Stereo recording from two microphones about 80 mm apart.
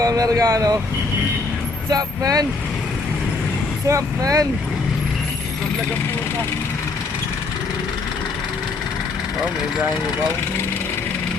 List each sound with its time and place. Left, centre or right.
0.0 s speech: right
1.9 s speech: right
3.8 s speech: right